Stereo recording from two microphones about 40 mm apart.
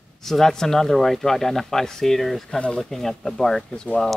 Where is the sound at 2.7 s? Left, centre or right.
Centre.